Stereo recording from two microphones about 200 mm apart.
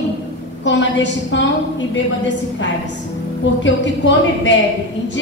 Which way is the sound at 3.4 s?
65° left (ahead or behind).